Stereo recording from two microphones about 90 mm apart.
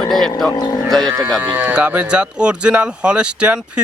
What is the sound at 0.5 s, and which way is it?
Speech, 50° left (ahead or behind).